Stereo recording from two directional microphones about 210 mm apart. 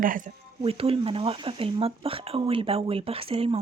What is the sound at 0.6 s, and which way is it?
Speech, 25° right (ahead or behind).